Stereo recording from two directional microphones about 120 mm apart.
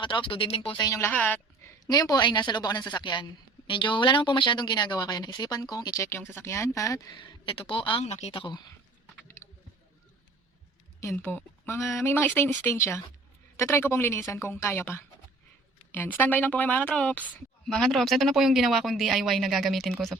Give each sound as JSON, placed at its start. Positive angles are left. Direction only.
{"t": 0.0, "sound": "a woman's voice", "side_deg": 45}
{"t": 0.8, "sound": "speech", "side_deg": 30}
{"t": 1.0, "sound": "speech", "side_deg": 15}
{"t": 1.9, "sound": "a woman's voice", "side_deg": 30}
{"t": 6.1, "sound": "speech", "side_deg": 20}
{"t": 7.2, "sound": "a woman's voice", "side_deg": 45}
{"t": 8.0, "sound": "speech", "side_deg": 65}
{"t": 8.3, "sound": "a woman's voice", "side_deg": 45}
{"t": 9.1, "sound": "a sound", "side_deg": 20}
{"t": 11.2, "sound": "a woman's voice", "side_deg": 15}